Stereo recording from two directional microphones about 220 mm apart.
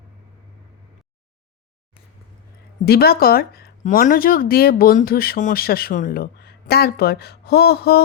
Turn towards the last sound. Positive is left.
turn(degrees=45)  # may be behind; listen again after turning